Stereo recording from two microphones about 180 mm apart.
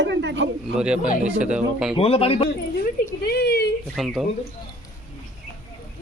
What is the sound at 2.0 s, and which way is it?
Speech, 30° left (ahead or behind).